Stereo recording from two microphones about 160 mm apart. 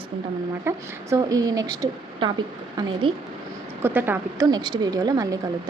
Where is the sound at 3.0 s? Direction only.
30° right (ahead or behind).